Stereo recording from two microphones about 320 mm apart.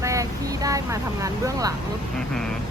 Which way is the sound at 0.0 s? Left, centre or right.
Centre.